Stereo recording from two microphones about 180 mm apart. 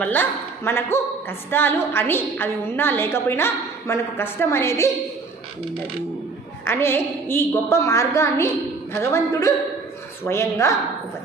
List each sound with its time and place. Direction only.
0.0 s a woman's voice: 10° left (ahead or behind)
6.7 s a woman's voice: 15° left (ahead or behind)